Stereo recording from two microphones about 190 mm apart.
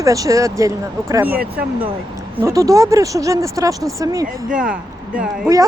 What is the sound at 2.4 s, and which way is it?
Speech, 15° right (ahead or behind).